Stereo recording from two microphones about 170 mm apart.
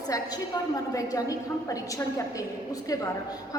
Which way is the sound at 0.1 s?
20° left (ahead or behind).